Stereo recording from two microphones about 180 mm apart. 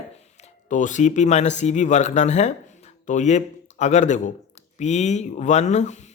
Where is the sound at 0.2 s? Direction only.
40° left (ahead or behind).